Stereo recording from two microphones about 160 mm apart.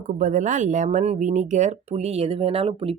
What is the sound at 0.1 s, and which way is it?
Speech, 55° right (ahead or behind).